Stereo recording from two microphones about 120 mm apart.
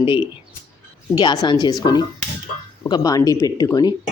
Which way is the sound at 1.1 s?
40° left (ahead or behind).